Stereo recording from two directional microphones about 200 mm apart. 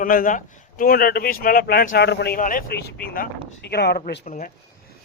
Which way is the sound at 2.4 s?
45° left (ahead or behind).